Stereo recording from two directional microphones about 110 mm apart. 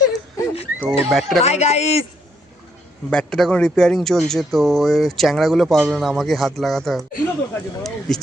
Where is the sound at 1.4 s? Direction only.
85° left.